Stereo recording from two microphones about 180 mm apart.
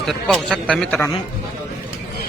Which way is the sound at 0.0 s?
Centre (ahead or behind).